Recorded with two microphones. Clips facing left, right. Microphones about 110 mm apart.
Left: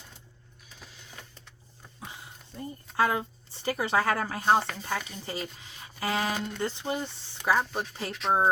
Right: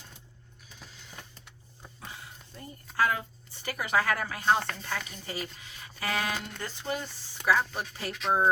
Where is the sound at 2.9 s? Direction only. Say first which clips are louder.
Left 2 dB; 25° left (ahead or behind).